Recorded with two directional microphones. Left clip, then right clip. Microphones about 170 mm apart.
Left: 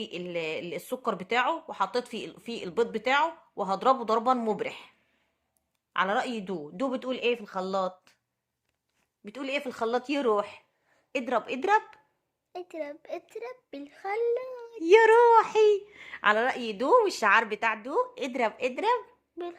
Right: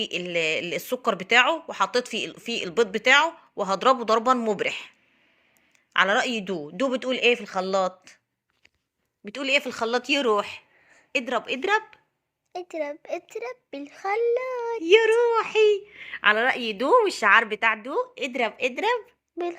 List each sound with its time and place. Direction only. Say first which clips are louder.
0.0 s speech: right 8 dB; 5° right (ahead or behind)
5.9 s a woman's voice: right 6 dB; 5° right (ahead or behind)
9.2 s a woman's voice: right 8 dB; 15° right (ahead or behind); by 11.9 s 5° left (ahead or behind)
12.5 s a woman's voice: right 6 dB; 20° right (ahead or behind)
14.8 s speech: right 1 dB; 10° left (ahead or behind)
15.0 s speech: left 2 dB; 25° left (ahead or behind)
15.4 s speech: right 2 dB; 10° left (ahead or behind)
16.5 s speech: right 3 dB; 5° right (ahead or behind)
18.0 s speech: right 2 dB; 5° left (ahead or behind)